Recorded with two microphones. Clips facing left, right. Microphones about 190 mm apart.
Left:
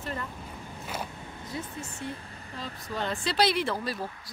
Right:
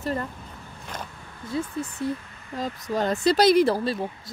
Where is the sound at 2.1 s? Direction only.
35° left (ahead or behind).